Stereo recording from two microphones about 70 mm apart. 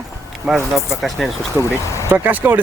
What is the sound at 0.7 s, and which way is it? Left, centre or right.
Speech, centre.